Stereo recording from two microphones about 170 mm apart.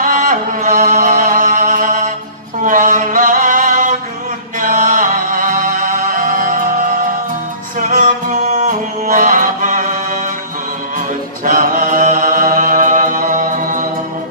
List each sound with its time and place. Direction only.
0.0 s music: 55° right (ahead or behind)
2.6 s a sound: 50° right (ahead or behind)
4.6 s music: 50° right (ahead or behind)
7.8 s music: 50° right (ahead or behind)
11.4 s mantra: 55° right (ahead or behind)